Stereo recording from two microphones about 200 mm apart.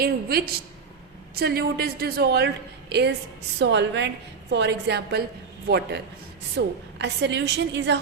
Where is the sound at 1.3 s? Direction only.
50° right (ahead or behind).